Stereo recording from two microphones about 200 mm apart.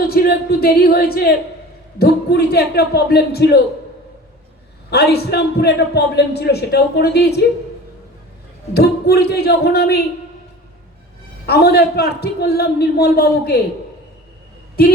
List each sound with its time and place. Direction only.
0.0 s a man's voice: 50° left (ahead or behind)
4.9 s a man's voice: 55° left (ahead or behind)
8.7 s a man's voice: 55° left (ahead or behind)
11.4 s a man's voice: 55° left (ahead or behind)